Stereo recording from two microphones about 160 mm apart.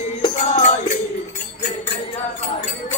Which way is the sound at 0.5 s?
45° left (ahead or behind).